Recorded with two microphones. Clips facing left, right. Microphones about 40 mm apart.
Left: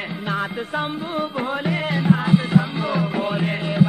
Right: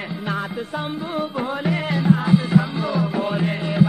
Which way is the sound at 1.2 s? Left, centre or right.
Left.